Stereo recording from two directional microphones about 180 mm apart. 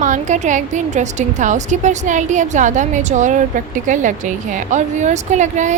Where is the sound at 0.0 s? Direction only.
40° right (ahead or behind).